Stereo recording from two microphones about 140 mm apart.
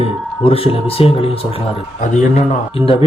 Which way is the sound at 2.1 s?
60° left (ahead or behind).